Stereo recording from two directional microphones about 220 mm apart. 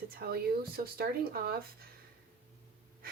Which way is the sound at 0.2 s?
45° right (ahead or behind).